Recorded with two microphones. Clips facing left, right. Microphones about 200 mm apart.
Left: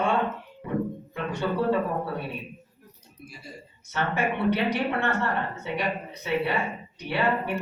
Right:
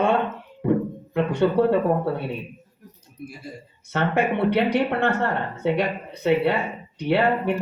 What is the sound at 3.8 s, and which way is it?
Speech, 60° right (ahead or behind).